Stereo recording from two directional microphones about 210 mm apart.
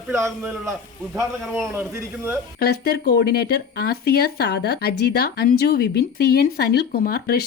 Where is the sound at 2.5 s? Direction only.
45° left (ahead or behind).